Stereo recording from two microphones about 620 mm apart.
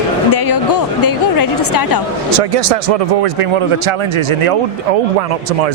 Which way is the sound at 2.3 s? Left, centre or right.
Right.